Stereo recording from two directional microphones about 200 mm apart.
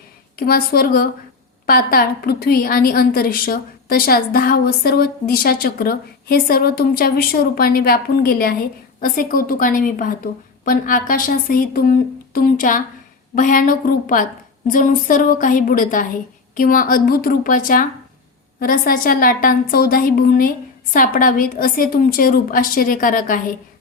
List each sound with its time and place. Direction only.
0.3 s a woman's voice: 50° left (ahead or behind)